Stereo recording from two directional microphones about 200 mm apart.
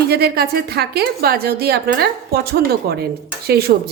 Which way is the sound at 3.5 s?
50° right (ahead or behind).